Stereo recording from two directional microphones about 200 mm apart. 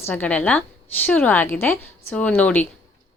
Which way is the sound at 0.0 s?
10° left (ahead or behind).